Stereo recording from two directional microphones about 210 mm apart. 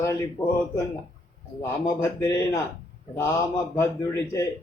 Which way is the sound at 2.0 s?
15° left (ahead or behind).